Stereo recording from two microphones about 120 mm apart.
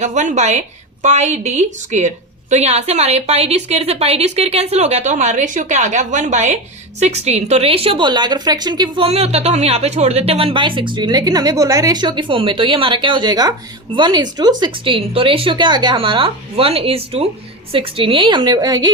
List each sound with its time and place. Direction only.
0.0 s a woman's voice: 85° right; by 9.0 s 35° right (ahead or behind)
9.0 s a woman's voice: 60° right (ahead or behind); by 14.5 s 35° right (ahead or behind)
14.6 s a woman's voice: 45° right (ahead or behind)